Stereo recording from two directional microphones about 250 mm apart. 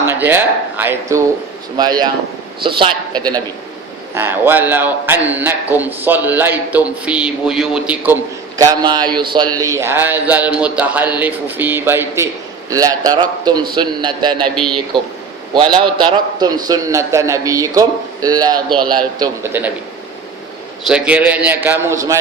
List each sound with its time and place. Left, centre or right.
0.0 s a man's voice: centre
14.5 s speech: centre
15.8 s a man's voice: centre
20.8 s a man's voice: centre